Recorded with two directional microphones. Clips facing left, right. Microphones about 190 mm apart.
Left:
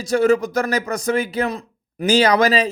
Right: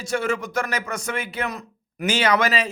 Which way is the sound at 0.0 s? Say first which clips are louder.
Left 9 dB; 35° left (ahead or behind).